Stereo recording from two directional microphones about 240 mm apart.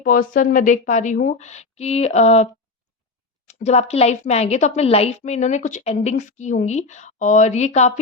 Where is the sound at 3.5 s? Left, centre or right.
Left.